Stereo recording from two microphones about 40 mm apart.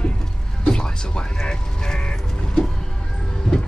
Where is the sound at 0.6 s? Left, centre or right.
Left.